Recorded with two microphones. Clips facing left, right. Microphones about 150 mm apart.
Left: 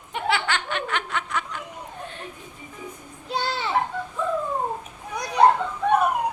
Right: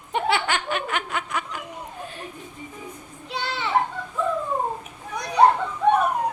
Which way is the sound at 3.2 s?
35° left (ahead or behind).